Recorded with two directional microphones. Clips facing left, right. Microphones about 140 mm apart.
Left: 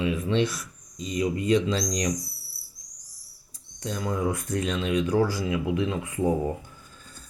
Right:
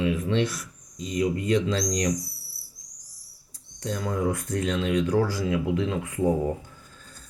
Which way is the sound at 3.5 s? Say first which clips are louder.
Right 2 dB; 15° left (ahead or behind).